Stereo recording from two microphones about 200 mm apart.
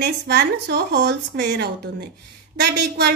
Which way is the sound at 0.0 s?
55° right (ahead or behind).